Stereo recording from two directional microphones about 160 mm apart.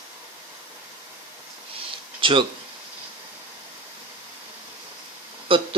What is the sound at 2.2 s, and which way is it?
Speech, 30° right (ahead or behind).